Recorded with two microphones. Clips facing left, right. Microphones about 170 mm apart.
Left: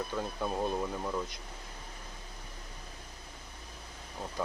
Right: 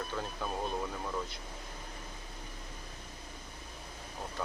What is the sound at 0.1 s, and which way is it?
Speech, 20° left (ahead or behind).